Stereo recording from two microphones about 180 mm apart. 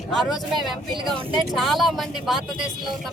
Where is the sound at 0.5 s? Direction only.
30° right (ahead or behind).